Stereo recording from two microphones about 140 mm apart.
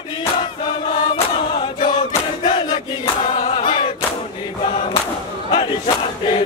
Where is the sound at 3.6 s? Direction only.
35° left (ahead or behind).